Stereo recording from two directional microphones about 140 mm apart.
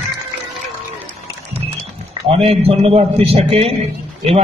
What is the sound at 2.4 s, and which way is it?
A man's voice, 45° right (ahead or behind).